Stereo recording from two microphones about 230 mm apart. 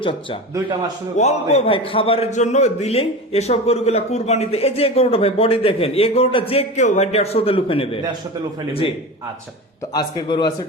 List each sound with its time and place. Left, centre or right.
0.0 s a man's voice: left
9.9 s a man's voice: centre